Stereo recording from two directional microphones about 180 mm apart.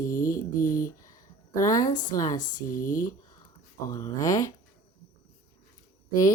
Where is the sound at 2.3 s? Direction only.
50° left (ahead or behind).